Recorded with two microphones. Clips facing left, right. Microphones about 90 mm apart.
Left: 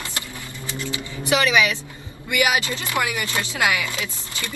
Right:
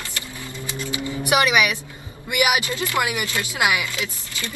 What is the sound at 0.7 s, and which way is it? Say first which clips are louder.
Music: right 2 dB; 20° right (ahead or behind).